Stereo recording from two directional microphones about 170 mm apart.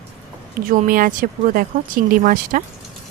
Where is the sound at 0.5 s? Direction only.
55° right (ahead or behind).